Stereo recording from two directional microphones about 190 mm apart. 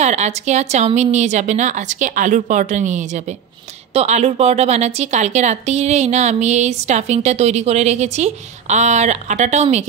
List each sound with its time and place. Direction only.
0.0 s a woman's voice: 35° right (ahead or behind)